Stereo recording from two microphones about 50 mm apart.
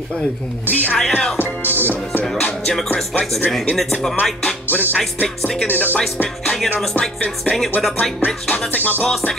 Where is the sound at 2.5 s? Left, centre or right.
Centre.